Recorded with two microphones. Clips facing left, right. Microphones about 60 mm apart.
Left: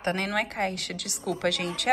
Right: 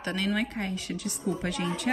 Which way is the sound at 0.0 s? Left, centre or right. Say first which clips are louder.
Left 2 dB; left.